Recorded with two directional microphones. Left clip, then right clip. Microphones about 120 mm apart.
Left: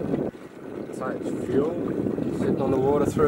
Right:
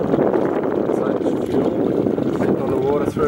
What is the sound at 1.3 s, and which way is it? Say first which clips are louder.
Boat: right 6 dB; 35° right (ahead or behind).